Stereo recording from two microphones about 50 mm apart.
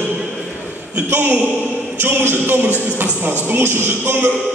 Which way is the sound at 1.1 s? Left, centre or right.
Right.